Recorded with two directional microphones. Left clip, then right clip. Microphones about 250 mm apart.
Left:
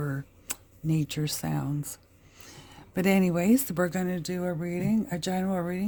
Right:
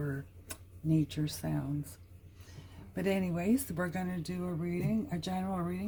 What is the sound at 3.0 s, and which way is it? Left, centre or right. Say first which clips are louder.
Speech: left 8 dB; left.